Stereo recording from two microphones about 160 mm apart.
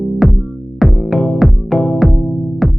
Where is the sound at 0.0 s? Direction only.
Centre (ahead or behind).